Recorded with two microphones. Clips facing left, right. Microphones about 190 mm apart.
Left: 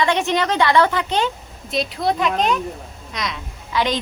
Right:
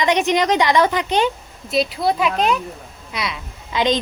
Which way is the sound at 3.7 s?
20° right (ahead or behind).